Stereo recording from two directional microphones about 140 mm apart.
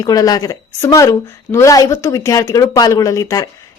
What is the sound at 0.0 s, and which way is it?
Speech, 25° left (ahead or behind).